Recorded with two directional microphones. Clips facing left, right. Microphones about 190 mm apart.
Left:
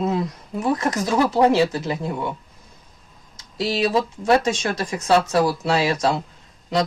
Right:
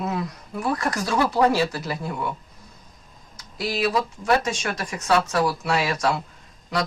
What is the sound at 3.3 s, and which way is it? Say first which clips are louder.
Speech: left 4 dB; 25° left (ahead or behind).